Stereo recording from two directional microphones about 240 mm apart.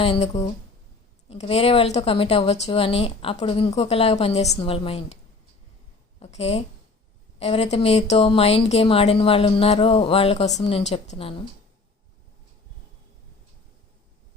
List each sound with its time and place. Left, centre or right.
0.0 s speech: left
6.1 s a woman's voice: left